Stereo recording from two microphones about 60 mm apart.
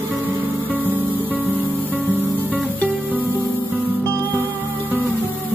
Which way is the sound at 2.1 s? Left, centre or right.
Right.